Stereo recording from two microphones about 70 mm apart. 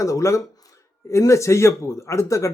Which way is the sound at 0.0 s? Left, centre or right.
Left.